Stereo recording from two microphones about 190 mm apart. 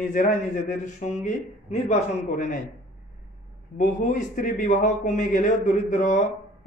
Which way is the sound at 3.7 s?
40° left (ahead or behind).